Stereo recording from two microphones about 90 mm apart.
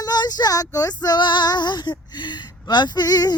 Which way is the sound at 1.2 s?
60° left (ahead or behind).